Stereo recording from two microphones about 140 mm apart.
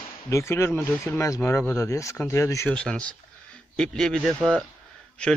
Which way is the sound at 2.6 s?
5° left (ahead or behind).